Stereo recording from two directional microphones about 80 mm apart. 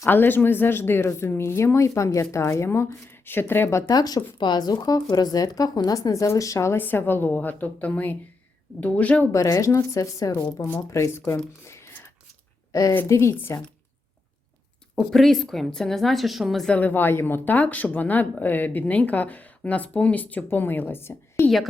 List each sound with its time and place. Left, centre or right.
0.0 s speech: left
3.9 s speech: left
6.7 s a woman's voice: left
9.6 s speech: left
11.6 s a sound: left
12.7 s speech: left
14.9 s a woman's voice: centre
16.6 s a woman's voice: centre